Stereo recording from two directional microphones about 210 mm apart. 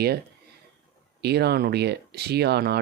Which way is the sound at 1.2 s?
50° right (ahead or behind).